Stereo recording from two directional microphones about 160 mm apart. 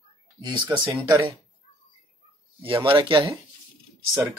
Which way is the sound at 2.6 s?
35° right (ahead or behind).